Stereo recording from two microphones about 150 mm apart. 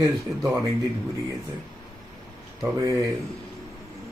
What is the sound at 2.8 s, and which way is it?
Speech, 20° right (ahead or behind).